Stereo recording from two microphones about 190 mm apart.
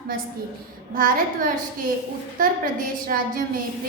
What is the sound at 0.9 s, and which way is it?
A woman's voice, 45° right (ahead or behind).